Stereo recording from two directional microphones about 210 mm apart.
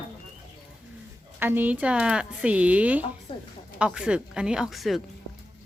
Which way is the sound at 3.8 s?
5° right (ahead or behind).